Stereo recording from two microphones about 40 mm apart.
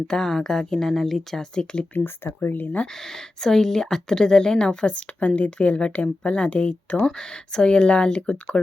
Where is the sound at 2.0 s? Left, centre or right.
Left.